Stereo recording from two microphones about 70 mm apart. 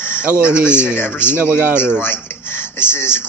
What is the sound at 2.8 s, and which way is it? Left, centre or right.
Speech, left.